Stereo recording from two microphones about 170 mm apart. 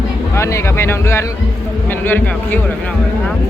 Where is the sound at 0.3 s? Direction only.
15° left (ahead or behind).